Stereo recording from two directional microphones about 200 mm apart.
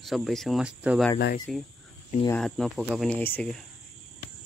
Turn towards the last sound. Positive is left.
turn(degrees=5)  # may be behind; listen again after turning